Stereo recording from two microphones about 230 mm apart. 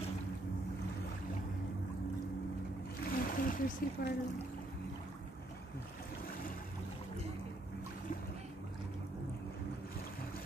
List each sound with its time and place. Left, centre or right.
3.0 s splash: left